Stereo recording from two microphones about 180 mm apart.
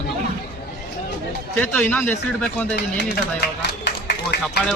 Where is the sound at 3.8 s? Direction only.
65° left (ahead or behind).